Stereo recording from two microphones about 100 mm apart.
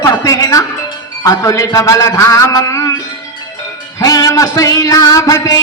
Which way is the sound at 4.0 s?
35° left (ahead or behind).